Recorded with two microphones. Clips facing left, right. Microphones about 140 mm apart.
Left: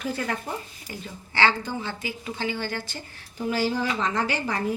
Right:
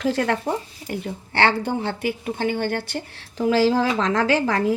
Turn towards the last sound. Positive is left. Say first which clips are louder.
# right 7 dB
turn(degrees=-90)